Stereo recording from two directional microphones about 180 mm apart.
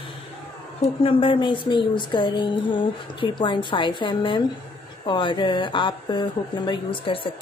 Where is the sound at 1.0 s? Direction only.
30° left (ahead or behind).